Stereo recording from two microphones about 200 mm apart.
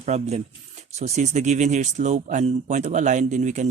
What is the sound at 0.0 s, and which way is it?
Speech, 35° right (ahead or behind).